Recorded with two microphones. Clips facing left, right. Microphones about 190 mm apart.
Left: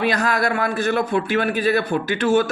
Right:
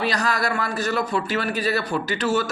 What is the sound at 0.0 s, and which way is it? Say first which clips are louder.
A man's voice: left 3 dB; 50° left (ahead or behind).